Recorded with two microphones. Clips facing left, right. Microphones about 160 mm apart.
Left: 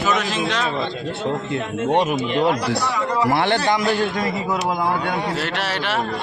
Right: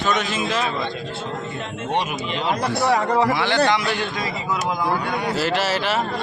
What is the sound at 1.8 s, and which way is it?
Speech, 45° left (ahead or behind).